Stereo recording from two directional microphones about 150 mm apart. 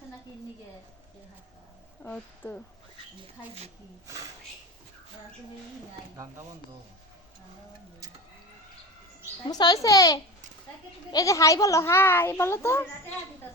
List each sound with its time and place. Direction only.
2.0 s a child's voice: 10° left (ahead or behind)
4.0 s speech: 20° right (ahead or behind)
9.5 s a child's voice: 25° left (ahead or behind)